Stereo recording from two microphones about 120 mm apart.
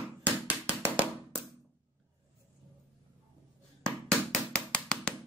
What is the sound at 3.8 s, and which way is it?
Music, 5° left (ahead or behind).